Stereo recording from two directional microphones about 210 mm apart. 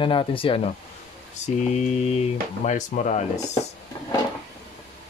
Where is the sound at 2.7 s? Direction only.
35° left (ahead or behind).